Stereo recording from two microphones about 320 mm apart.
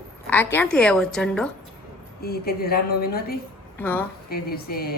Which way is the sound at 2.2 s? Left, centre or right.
Left.